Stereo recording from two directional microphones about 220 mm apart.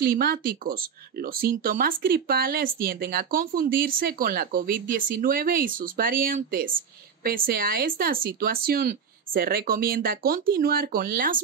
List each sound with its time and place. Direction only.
0.0 s speech: 45° right (ahead or behind)